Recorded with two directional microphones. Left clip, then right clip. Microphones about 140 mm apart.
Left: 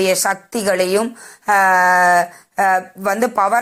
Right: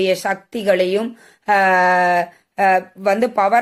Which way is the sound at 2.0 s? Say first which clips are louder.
Left 3 dB; centre (ahead or behind).